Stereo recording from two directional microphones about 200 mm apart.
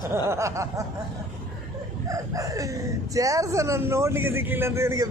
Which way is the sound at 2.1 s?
15° right (ahead or behind).